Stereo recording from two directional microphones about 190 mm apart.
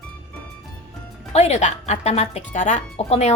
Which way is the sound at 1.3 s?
35° left (ahead or behind).